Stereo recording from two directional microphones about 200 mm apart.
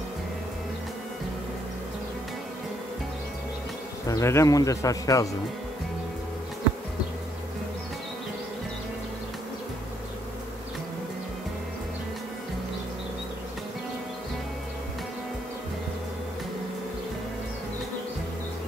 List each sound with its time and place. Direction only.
4.1 s speech: 15° left (ahead or behind)